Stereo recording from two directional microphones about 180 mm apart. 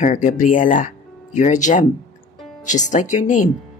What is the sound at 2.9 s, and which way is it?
Speech, 45° left (ahead or behind).